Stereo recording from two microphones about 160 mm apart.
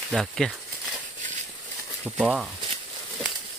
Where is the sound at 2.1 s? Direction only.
5° right (ahead or behind).